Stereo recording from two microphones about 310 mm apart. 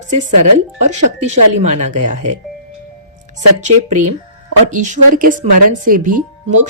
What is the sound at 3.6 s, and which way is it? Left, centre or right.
A woman's voice, right.